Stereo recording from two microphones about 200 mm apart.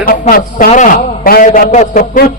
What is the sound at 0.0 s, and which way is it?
A man's voice, 45° left (ahead or behind).